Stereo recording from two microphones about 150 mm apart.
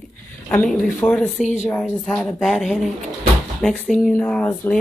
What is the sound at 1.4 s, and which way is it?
Speech, 50° left (ahead or behind).